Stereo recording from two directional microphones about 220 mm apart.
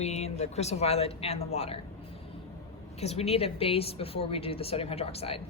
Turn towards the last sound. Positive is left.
turn(degrees=25)  # may be behind; listen again after turning